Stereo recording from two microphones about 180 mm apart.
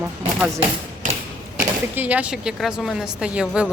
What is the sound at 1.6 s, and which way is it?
Speech, 10° right (ahead or behind).